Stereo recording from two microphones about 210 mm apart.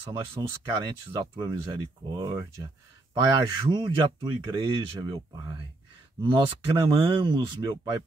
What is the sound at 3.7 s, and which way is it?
Speech, 20° right (ahead or behind).